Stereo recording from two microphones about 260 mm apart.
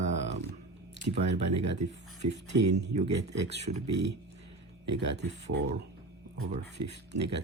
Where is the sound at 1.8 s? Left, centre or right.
Right.